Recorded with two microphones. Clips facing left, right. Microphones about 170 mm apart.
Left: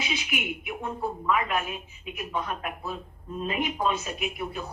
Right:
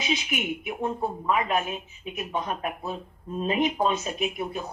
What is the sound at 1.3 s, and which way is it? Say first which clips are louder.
A woman's voice: right 2 dB; 25° right (ahead or behind).